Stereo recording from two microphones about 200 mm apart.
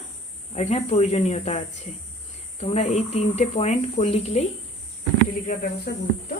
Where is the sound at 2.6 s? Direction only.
35° left (ahead or behind).